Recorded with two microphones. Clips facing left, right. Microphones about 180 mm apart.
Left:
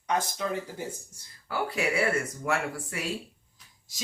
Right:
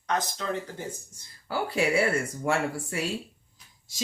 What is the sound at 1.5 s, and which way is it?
Speech, 30° right (ahead or behind).